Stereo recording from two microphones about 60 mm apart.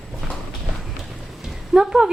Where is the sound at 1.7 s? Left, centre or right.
Centre.